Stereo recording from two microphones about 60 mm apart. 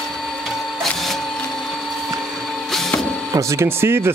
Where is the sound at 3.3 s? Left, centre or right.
Right.